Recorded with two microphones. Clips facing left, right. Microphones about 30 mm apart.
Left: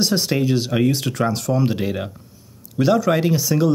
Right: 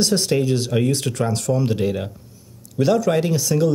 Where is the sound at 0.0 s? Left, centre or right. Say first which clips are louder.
Even; centre.